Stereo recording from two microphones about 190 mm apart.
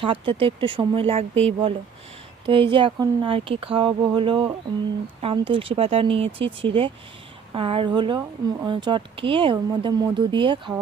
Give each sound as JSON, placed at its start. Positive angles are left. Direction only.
{"t": 0.0, "sound": "speech", "side_deg": -25}